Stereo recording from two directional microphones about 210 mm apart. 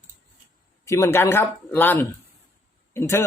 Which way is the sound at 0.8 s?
15° left (ahead or behind).